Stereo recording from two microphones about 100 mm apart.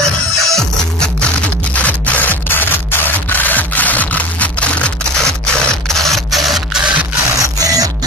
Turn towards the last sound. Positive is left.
turn(degrees=-40)  # may be behind; listen again after turning